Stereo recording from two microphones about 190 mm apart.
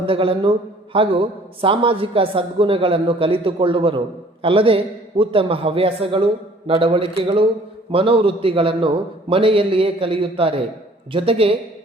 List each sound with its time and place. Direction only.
0.0 s a woman's voice: 30° right (ahead or behind)